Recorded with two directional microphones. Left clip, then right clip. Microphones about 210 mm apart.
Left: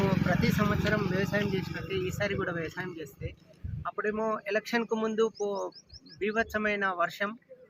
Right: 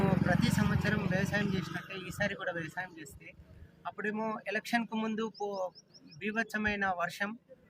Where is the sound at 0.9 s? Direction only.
25° right (ahead or behind).